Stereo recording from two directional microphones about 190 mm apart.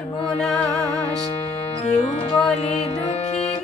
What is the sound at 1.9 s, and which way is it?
Music, 35° left (ahead or behind).